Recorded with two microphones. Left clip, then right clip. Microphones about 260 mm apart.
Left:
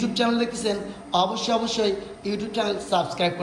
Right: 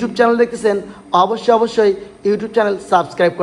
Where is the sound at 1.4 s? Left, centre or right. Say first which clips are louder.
Right 11 dB; right.